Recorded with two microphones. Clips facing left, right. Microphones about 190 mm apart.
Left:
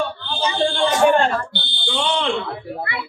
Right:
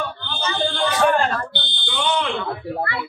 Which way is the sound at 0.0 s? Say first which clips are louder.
Left 4 dB; 30° left (ahead or behind).